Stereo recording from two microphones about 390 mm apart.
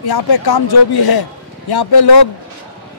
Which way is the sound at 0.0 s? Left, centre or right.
Left.